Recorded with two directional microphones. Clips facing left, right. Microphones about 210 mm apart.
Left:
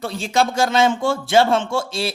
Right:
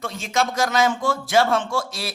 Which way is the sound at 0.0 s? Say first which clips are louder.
Left 4 dB; 30° left (ahead or behind).